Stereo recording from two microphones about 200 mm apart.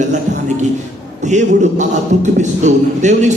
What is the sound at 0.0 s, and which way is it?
A man's voice, 35° right (ahead or behind).